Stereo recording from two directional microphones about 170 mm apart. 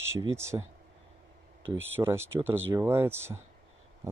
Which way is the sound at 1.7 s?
15° right (ahead or behind).